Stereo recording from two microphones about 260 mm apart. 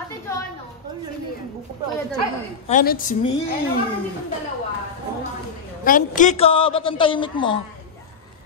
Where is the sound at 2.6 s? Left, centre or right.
Left.